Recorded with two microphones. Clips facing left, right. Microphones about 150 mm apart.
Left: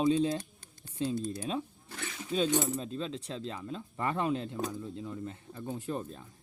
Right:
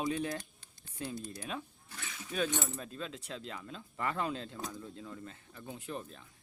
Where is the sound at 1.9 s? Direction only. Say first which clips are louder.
Left 6 dB; 45° left (ahead or behind).